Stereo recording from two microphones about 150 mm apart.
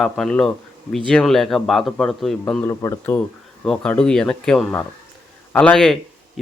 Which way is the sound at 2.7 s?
20° left (ahead or behind).